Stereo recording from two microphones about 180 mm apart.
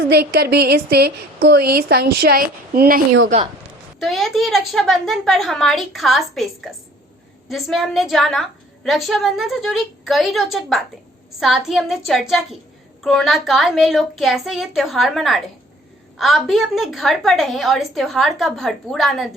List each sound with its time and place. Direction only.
0.1 s a woman's voice: 65° right (ahead or behind)
3.2 s a woman's voice: 40° right (ahead or behind)
4.0 s a woman's voice: centre (ahead or behind)